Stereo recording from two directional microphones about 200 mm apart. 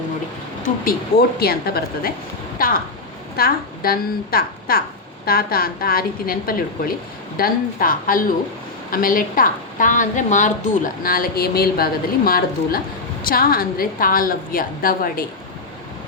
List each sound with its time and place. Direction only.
1.4 s a woman's voice: 50° left (ahead or behind)